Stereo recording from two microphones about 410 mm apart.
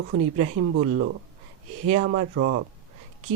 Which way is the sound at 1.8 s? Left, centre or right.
Centre.